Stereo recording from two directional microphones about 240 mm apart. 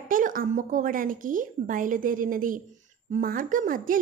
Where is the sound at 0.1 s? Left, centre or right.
Right.